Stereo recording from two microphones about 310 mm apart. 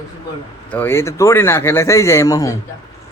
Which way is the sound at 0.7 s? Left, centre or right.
Centre.